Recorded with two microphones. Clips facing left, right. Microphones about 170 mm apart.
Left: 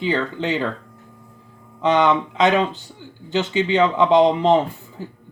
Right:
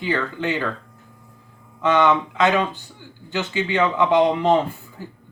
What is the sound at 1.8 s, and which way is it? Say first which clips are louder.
Speech: left 1 dB; 20° left (ahead or behind).